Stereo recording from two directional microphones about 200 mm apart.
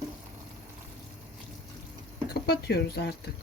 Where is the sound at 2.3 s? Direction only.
50° left (ahead or behind).